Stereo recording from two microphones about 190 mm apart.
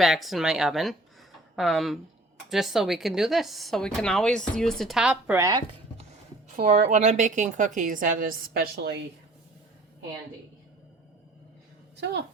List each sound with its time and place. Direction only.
0.0 s speech: centre (ahead or behind); by 5.6 s 15° right (ahead or behind)
6.6 s a woman's voice: 40° right (ahead or behind); by 9.0 s 60° right (ahead or behind)